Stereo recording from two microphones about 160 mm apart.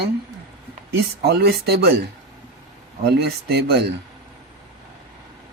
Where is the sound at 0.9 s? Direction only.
90° right.